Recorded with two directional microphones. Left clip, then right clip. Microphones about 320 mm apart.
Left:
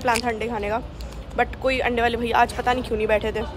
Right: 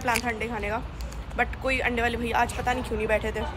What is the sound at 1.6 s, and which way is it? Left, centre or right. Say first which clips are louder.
Speech: left 5 dB; centre.